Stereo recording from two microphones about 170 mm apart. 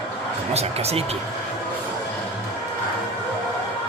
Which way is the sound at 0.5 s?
35° right (ahead or behind).